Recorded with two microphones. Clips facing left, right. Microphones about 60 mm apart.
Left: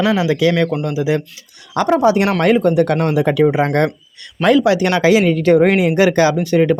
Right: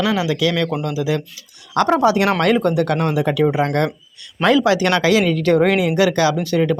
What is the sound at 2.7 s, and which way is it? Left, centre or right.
Speech, left.